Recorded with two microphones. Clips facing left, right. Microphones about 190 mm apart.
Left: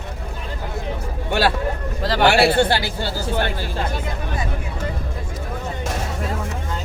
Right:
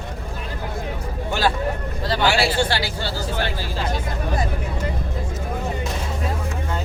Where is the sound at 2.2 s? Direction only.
60° left (ahead or behind).